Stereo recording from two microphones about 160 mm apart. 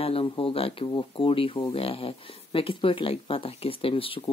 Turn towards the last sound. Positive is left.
turn(degrees=35)  # may be behind; listen again after turning